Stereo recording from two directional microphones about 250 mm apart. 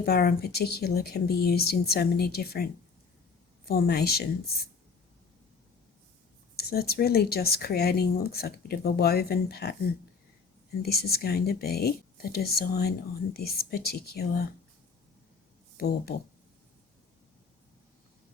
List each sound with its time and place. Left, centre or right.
0.0 s speech: left
3.7 s speech: left
6.6 s speech: left
10.8 s speech: left
15.8 s speech: left